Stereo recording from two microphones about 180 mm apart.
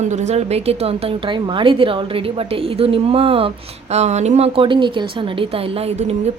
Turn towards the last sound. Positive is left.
turn(degrees=-35)  # may be behind; listen again after turning